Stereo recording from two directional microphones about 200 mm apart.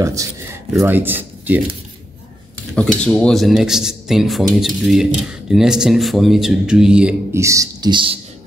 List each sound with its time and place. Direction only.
0.0 s speech: 15° right (ahead or behind)
3.0 s speech: 5° left (ahead or behind); by 8.2 s 25° right (ahead or behind)